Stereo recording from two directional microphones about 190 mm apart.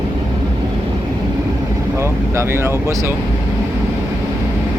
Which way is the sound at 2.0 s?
15° right (ahead or behind).